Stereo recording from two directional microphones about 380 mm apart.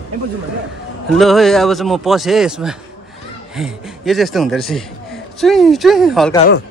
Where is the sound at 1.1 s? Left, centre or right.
Centre.